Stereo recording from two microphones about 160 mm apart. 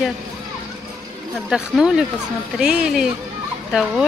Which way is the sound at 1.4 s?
5° right (ahead or behind).